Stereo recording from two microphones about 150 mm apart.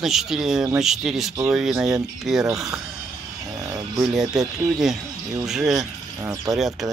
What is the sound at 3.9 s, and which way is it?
Speech, centre (ahead or behind).